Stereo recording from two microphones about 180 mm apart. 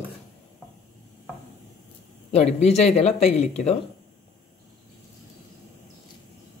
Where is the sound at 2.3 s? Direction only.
35° left (ahead or behind).